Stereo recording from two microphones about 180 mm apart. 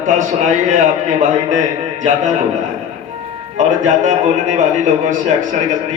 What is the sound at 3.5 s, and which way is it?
A man's voice, 45° right (ahead or behind).